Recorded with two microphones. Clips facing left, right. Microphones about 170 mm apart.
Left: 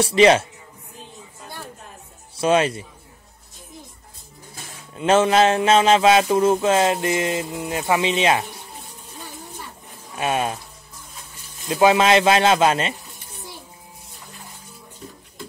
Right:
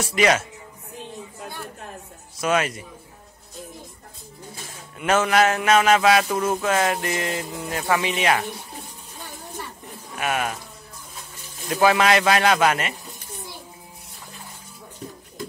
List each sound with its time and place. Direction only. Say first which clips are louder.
0.0 s speech: left 6 dB; 30° left (ahead or behind)
2.4 s speech: left 4 dB; 30° left (ahead or behind)
4.9 s speech: left 3 dB; 25° left (ahead or behind)
10.1 s speech: left 3 dB; 25° left (ahead or behind)
11.7 s speech: left 3 dB; 20° left (ahead or behind)